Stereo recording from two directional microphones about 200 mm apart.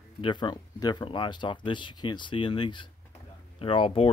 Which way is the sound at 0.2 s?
25° left (ahead or behind).